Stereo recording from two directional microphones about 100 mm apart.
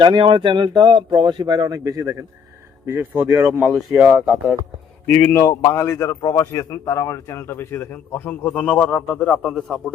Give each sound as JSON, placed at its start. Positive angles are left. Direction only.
{"t": 0.0, "sound": "speech", "side_deg": -55}
{"t": 3.2, "sound": "speech", "side_deg": -10}
{"t": 5.1, "sound": "a man's voice", "side_deg": 20}
{"t": 9.4, "sound": "a man's voice", "side_deg": 5}